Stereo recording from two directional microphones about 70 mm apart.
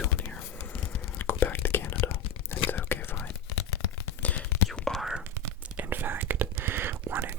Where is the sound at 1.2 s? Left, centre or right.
Left.